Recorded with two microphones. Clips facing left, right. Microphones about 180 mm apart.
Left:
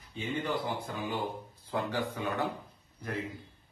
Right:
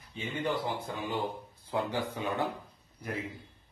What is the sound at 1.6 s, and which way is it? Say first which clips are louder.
Speech: right 1 dB; 15° right (ahead or behind).